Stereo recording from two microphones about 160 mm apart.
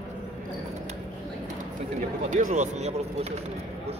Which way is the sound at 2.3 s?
50° right (ahead or behind).